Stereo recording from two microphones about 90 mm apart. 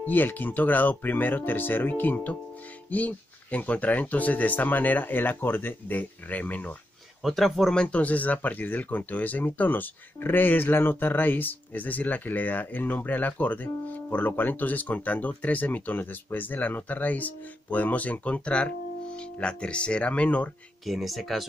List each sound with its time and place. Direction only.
0.0 s speech: 20° left (ahead or behind)
7.2 s speech: centre (ahead or behind)
20.8 s speech: centre (ahead or behind)